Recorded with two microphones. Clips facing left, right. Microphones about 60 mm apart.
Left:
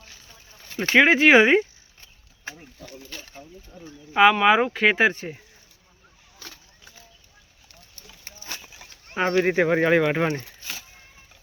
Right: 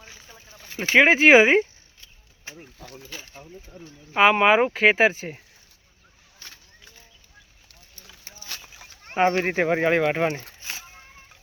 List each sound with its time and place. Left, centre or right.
0.0 s a sound: right
0.6 s speech: centre
3.8 s speech: right
4.1 s speech: centre
4.7 s speech: centre
9.1 s speech: right
9.5 s speech: centre